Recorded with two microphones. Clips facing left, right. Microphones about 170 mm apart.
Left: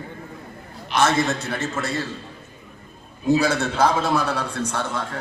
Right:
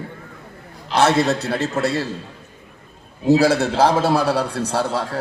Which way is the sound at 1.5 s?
35° right (ahead or behind).